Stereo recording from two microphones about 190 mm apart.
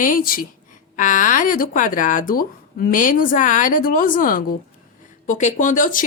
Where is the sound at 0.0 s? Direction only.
45° left (ahead or behind).